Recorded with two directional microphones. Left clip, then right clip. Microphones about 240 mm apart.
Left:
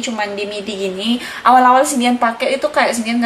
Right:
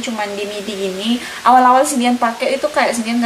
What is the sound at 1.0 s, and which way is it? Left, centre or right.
A woman's voice, centre.